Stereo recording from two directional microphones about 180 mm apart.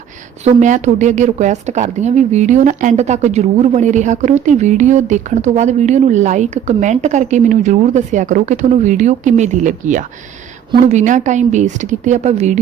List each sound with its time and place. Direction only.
0.4 s a woman's voice: 40° right (ahead or behind)